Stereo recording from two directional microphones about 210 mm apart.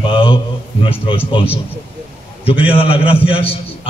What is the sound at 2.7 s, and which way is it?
Speech, 25° left (ahead or behind).